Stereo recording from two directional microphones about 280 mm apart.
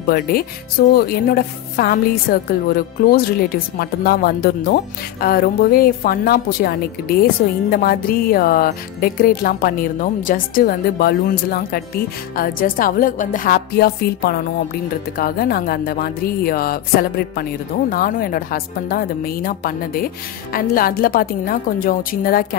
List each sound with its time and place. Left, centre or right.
0.1 s a woman's voice: left